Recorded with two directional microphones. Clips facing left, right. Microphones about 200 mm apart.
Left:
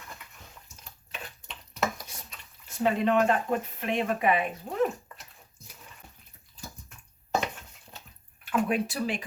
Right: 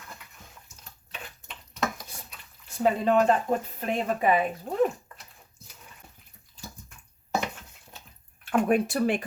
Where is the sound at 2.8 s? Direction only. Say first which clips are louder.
Right 2 dB; 35° right (ahead or behind).